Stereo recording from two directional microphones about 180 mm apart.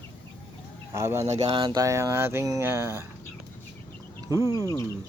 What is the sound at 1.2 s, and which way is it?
Speech, 35° right (ahead or behind).